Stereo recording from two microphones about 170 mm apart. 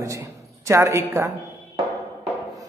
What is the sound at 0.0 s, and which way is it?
A woman's voice, 20° right (ahead or behind).